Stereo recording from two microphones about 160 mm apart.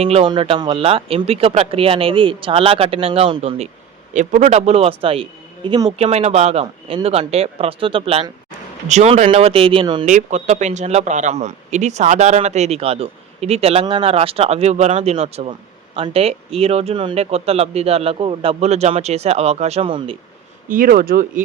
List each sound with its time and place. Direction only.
0.0 s speech: 40° right (ahead or behind)
4.1 s speech: 50° right (ahead or behind); by 5.9 s 30° right (ahead or behind)
6.0 s speech: 40° right (ahead or behind)
10.1 s speech: 50° right (ahead or behind); by 20.1 s 35° right (ahead or behind)
20.7 s speech: 65° right (ahead or behind)